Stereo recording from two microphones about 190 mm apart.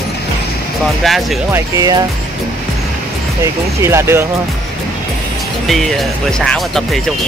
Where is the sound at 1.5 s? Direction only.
20° right (ahead or behind).